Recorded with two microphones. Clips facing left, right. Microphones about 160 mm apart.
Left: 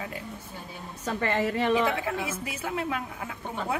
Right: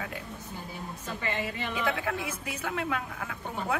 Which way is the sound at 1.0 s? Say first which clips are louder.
Left 7 dB; 70° left (ahead or behind).